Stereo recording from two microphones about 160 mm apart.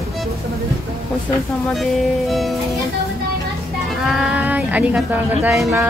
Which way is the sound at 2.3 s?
Centre (ahead or behind).